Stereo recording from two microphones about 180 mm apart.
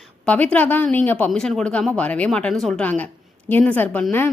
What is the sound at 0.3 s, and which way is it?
Speech, 5° left (ahead or behind).